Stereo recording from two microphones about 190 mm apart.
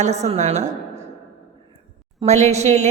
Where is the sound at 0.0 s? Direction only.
35° right (ahead or behind).